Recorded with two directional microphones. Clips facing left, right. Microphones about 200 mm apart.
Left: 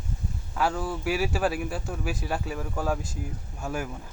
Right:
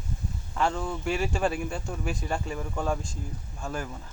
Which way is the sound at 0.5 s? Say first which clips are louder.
Left 1 dB; 5° left (ahead or behind).